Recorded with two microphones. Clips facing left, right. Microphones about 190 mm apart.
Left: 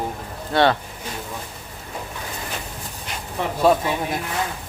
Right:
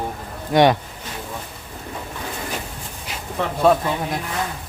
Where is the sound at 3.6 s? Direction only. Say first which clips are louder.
Right 1 dB; 5° left (ahead or behind).